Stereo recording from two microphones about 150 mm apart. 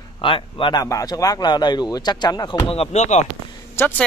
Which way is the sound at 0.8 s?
20° left (ahead or behind).